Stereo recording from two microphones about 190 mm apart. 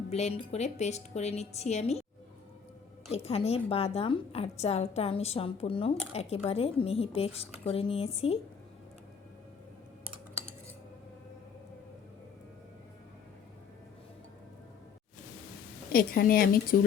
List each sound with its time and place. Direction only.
0.1 s a woman's voice: 35° left (ahead or behind)
3.1 s a woman's voice: 30° left (ahead or behind)
15.9 s speech: 50° left (ahead or behind)